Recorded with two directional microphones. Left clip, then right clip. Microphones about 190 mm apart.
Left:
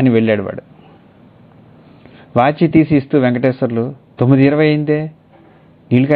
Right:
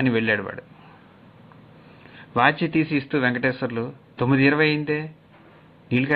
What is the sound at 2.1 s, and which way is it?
Speech, 20° left (ahead or behind).